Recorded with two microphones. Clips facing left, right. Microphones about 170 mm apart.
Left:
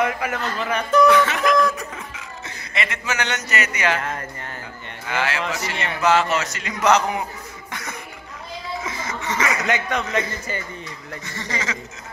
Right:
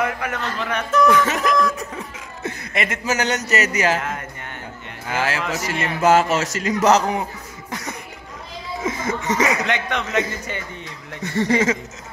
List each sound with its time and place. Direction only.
0.0 s a man's voice: 5° left (ahead or behind)
1.0 s speech: 45° right (ahead or behind)
1.5 s a man's voice: centre (ahead or behind)
2.4 s speech: 50° right (ahead or behind)
4.0 s a man's voice: 5° right (ahead or behind)
5.0 s speech: 40° right (ahead or behind)
8.8 s speech: 45° right (ahead or behind)
9.7 s a man's voice: centre (ahead or behind)
11.2 s speech: 60° right (ahead or behind)